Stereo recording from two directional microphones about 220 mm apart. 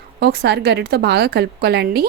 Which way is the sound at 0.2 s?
45° right (ahead or behind).